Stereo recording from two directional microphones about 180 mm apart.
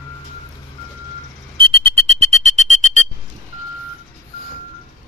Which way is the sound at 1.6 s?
30° right (ahead or behind).